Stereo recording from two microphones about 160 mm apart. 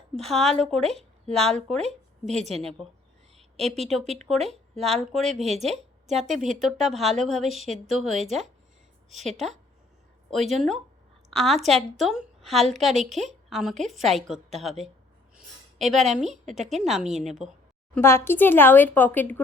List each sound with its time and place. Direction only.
0.2 s a woman's voice: centre (ahead or behind)
2.3 s a woman's voice: 45° right (ahead or behind)
4.0 s a woman's voice: 45° right (ahead or behind)
4.3 s a woman's voice: centre (ahead or behind)
15.8 s a woman's voice: centre (ahead or behind)
17.9 s speech: 15° left (ahead or behind)